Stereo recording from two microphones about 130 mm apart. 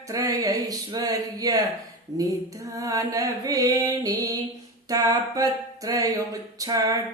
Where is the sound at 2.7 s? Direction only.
25° right (ahead or behind).